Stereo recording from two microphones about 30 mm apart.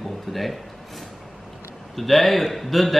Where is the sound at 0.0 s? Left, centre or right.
Centre.